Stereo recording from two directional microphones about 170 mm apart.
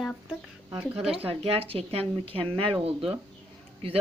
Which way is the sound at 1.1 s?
35° right (ahead or behind).